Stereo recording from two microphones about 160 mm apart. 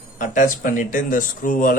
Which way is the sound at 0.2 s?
55° left (ahead or behind).